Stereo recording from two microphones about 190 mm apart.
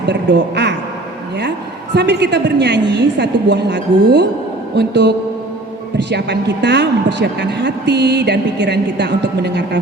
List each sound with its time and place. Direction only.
0.1 s speech: 65° right (ahead or behind)
2.0 s speech: 65° right (ahead or behind)